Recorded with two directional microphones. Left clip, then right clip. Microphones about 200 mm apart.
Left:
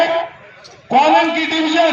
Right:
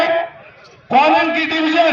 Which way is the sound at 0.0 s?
Centre (ahead or behind).